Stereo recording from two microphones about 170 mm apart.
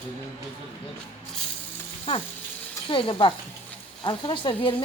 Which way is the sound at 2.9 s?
30° left (ahead or behind).